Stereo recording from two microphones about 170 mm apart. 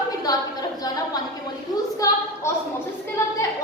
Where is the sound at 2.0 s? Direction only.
20° left (ahead or behind).